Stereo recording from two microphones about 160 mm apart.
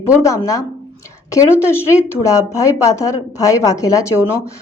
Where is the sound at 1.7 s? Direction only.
15° left (ahead or behind).